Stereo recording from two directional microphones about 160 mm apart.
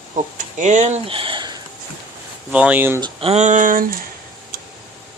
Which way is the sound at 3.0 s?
35° right (ahead or behind).